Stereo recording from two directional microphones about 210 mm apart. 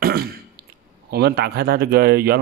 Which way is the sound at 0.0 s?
50° right (ahead or behind).